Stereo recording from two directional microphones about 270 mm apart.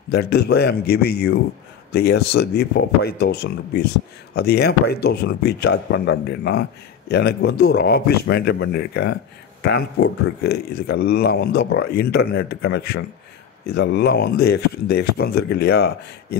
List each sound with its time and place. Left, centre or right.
0.1 s a man's voice: left